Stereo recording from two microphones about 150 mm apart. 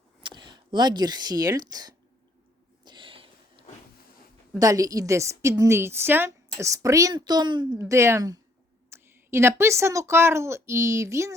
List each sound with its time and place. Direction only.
0.2 s speech: 30° right (ahead or behind)
2.8 s a sound: 35° right (ahead or behind)
4.6 s a woman's voice: 25° right (ahead or behind)
7.8 s a woman's voice: 20° right (ahead or behind)